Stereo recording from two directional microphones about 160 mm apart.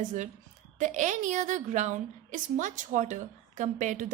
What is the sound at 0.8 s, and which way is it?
A woman's voice, 50° right (ahead or behind).